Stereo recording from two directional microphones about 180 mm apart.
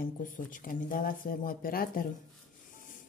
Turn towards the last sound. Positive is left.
turn(degrees=50)  # may be behind; listen again after turning